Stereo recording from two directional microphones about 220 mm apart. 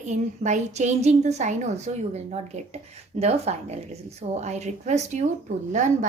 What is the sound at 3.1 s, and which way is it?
Speech, 30° right (ahead or behind).